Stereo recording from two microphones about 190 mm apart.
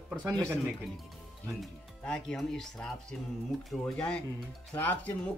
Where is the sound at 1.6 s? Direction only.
5° left (ahead or behind).